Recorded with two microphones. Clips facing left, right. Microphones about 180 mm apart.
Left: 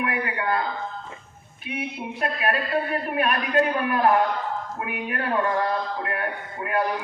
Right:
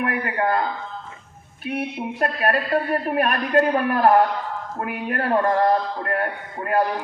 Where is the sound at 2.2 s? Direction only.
45° right (ahead or behind).